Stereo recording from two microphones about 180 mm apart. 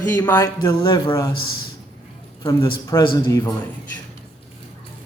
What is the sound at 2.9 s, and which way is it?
Speech, 20° left (ahead or behind).